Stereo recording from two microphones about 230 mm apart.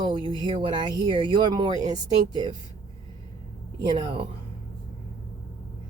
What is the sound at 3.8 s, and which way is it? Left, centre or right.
Speech, right.